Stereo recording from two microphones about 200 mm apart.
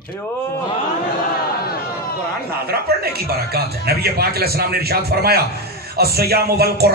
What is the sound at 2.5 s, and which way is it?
A man's voice, 50° right (ahead or behind).